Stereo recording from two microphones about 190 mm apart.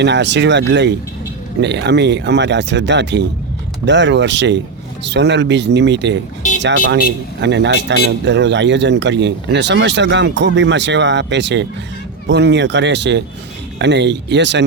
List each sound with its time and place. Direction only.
0.0 s a man's voice: 65° right (ahead or behind)